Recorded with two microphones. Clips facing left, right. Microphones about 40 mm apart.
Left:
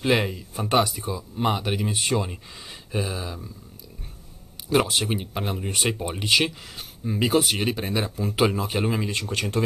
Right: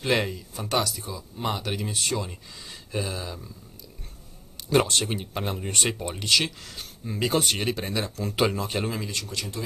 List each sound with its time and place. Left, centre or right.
0.0 s speech: centre
2.9 s speech: centre
4.6 s speech: centre; by 9.3 s left
9.3 s speech: left